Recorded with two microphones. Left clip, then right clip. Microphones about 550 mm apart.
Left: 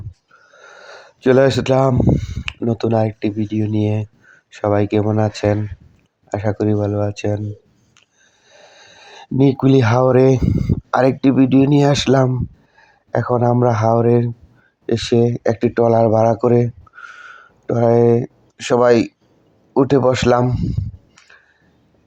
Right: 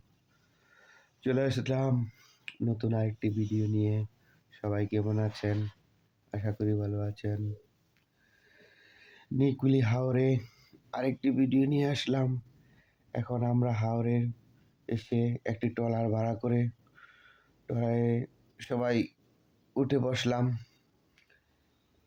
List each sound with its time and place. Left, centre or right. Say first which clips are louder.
0.9 s speech: left 18 dB; right
8.4 s speech: left 16 dB; right
17.7 s speech: left 18 dB; right